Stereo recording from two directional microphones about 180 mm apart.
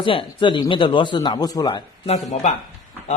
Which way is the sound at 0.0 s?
30° left (ahead or behind).